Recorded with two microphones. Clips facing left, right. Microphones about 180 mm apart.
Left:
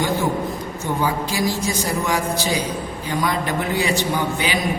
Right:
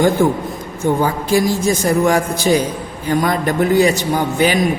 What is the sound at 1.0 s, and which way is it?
Speech, 50° right (ahead or behind).